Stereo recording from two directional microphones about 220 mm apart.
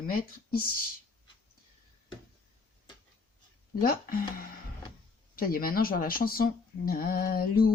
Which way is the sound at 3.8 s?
40° left (ahead or behind).